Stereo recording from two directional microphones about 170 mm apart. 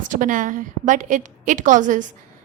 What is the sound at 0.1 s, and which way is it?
A woman's voice, 50° right (ahead or behind).